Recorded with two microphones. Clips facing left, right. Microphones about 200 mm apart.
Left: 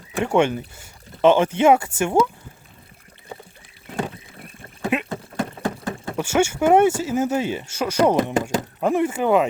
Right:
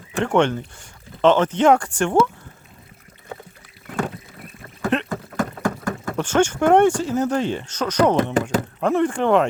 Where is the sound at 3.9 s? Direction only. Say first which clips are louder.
Right 2 dB; 20° left (ahead or behind).